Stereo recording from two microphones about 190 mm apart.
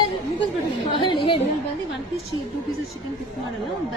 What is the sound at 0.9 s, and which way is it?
Chatter, 25° left (ahead or behind).